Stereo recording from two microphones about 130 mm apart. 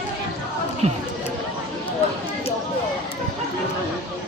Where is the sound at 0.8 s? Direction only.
55° right (ahead or behind).